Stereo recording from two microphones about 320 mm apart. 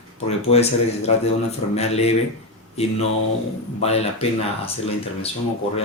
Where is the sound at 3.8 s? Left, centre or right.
Centre.